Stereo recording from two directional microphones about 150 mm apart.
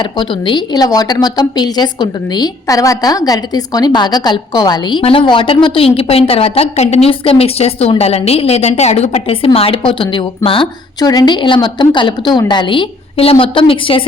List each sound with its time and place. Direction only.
0.0 s a woman's voice: 30° left (ahead or behind)